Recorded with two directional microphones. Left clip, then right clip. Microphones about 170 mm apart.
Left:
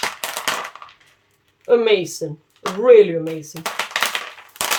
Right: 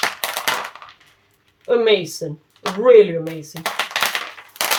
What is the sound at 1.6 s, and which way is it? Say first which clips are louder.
Speech: left 1 dB; 40° left (ahead or behind).